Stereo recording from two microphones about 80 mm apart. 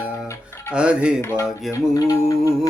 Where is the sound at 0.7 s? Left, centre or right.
Centre.